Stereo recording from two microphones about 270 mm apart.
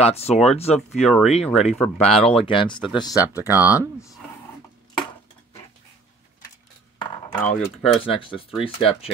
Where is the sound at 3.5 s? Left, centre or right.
Centre.